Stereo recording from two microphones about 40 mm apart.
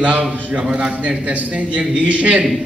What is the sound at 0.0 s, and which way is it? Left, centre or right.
Speech, right.